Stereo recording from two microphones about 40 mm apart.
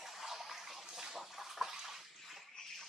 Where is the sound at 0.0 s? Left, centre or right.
Centre.